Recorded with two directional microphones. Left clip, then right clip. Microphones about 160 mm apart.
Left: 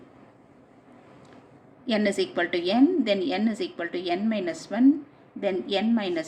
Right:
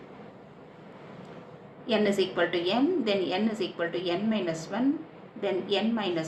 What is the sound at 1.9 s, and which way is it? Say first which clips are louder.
A woman's voice: even; 70° left (ahead or behind).